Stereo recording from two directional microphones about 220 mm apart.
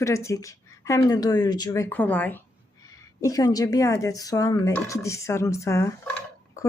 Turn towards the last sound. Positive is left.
turn(degrees=10)  # may be behind; listen again after turning